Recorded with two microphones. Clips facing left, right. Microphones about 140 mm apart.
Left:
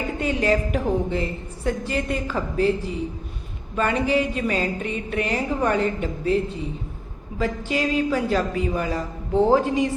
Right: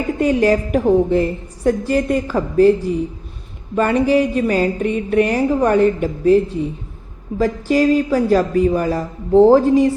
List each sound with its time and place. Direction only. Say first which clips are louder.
0.2 s music: right 7 dB; 40° right (ahead or behind)
7.3 s a woman's voice: right 8 dB; 40° right (ahead or behind)